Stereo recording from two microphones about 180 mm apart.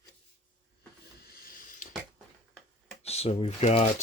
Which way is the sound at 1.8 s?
45° left (ahead or behind).